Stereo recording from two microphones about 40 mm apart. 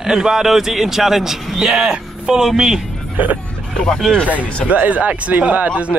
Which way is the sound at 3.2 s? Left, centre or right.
Right.